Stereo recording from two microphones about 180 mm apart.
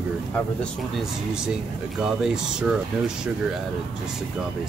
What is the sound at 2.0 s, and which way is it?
Speech, 5° right (ahead or behind).